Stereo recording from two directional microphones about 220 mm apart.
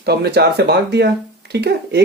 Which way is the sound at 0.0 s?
50° right (ahead or behind).